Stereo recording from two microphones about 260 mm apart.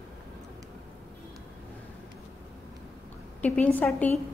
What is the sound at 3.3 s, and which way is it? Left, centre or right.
Speech, centre.